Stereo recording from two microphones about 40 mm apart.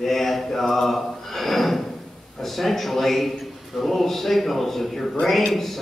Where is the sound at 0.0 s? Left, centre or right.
Centre.